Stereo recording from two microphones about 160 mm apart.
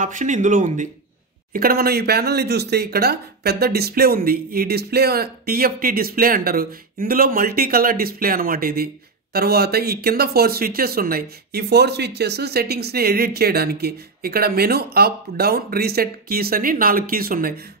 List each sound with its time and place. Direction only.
0.0 s speech: 55° right (ahead or behind)
1.5 s speech: 70° right (ahead or behind)